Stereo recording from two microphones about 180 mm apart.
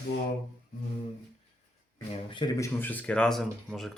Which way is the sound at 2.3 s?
20° left (ahead or behind).